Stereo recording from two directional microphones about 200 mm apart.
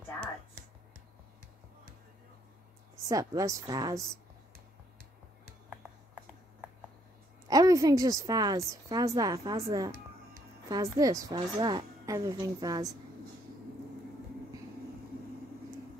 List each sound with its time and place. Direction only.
3.1 s a woman's voice: 15° right (ahead or behind)
7.4 s a woman's voice: 15° right (ahead or behind)